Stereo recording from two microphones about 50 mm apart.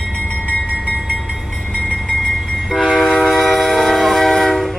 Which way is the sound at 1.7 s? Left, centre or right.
Right.